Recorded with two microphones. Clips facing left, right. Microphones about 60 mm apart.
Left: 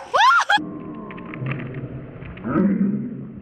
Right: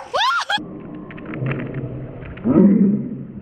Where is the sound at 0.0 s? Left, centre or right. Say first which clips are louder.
Left 4 dB; centre.